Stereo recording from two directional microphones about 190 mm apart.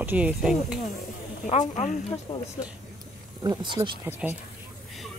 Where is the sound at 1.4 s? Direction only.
40° left (ahead or behind).